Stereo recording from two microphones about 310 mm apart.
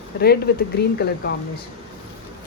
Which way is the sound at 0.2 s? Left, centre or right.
Left.